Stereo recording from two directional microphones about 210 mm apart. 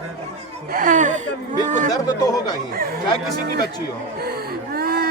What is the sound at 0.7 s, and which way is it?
Speech, 40° right (ahead or behind).